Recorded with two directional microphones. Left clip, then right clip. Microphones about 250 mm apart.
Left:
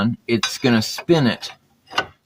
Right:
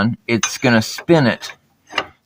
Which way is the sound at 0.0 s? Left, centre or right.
Right.